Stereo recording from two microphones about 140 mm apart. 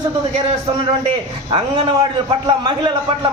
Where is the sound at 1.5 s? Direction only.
35° right (ahead or behind).